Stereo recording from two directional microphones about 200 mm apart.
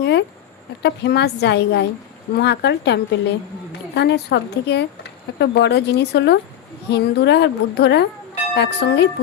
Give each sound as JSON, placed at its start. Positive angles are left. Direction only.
{"t": 0.0, "sound": "a woman's voice", "side_deg": 60}